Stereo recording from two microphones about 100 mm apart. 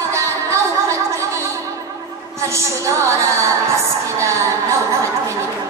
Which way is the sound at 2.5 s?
30° right (ahead or behind).